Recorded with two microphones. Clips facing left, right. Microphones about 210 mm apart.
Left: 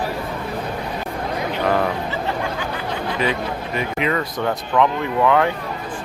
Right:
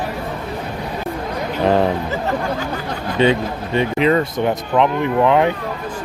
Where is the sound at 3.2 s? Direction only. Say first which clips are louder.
Right 9 dB; 30° right (ahead or behind).